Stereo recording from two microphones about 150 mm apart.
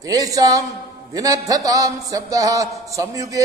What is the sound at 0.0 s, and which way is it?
A man's voice, 25° right (ahead or behind).